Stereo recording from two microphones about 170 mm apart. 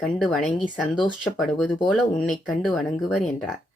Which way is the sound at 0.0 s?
5° left (ahead or behind).